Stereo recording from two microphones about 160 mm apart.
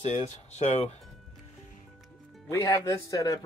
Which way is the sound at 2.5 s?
20° left (ahead or behind).